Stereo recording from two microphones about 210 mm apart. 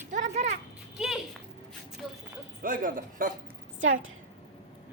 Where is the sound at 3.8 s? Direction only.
70° right (ahead or behind).